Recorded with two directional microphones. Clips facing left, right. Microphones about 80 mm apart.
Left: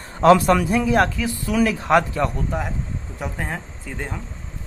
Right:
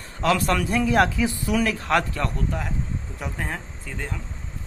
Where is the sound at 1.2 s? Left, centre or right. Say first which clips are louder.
Right 1 dB; centre.